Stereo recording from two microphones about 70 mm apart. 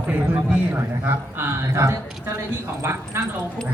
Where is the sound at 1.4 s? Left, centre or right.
Right.